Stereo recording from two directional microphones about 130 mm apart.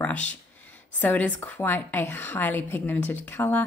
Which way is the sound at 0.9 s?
10° left (ahead or behind).